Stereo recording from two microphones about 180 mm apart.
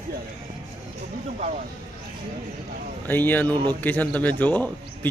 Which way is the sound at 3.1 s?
10° left (ahead or behind).